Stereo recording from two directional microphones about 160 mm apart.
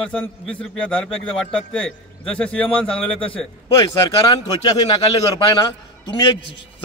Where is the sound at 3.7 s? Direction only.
25° left (ahead or behind).